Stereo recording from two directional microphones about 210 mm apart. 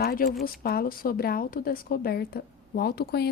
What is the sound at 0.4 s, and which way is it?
A woman's voice, 45° left (ahead or behind).